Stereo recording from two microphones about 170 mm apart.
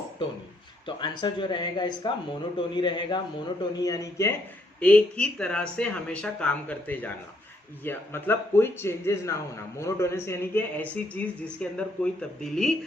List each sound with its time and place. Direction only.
0.9 s speech: 25° left (ahead or behind)
4.8 s speech: 5° left (ahead or behind)